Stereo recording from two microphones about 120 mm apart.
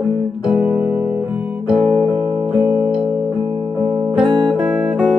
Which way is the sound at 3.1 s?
20° right (ahead or behind).